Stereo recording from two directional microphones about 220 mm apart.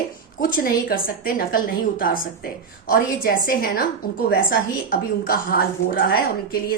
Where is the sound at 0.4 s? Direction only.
40° left (ahead or behind).